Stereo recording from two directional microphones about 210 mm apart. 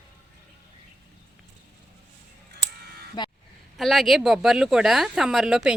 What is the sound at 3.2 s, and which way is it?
Speech, 20° left (ahead or behind).